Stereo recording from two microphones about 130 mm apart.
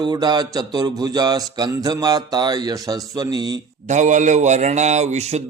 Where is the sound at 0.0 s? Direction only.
30° right (ahead or behind).